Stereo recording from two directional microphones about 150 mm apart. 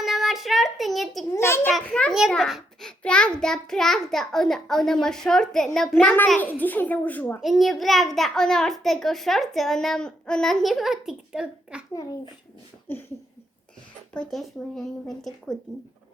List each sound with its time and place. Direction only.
0.0 s child singing: centre (ahead or behind)
1.3 s a child's voice: 15° left (ahead or behind)
1.7 s a child's voice: 5° left (ahead or behind)
7.4 s a child's voice: centre (ahead or behind)
12.9 s a child's voice: 15° left (ahead or behind)
14.1 s a child's voice: 5° left (ahead or behind)